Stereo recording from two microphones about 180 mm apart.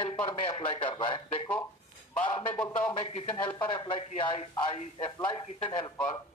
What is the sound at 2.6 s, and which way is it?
Speech, 5° left (ahead or behind).